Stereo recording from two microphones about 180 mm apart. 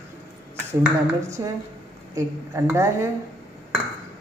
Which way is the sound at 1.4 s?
20° right (ahead or behind).